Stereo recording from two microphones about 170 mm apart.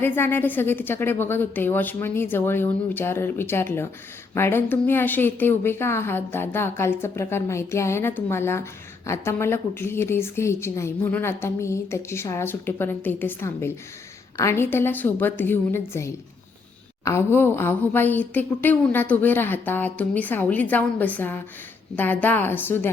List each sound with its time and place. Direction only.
0.0 s a woman's voice: 10° left (ahead or behind)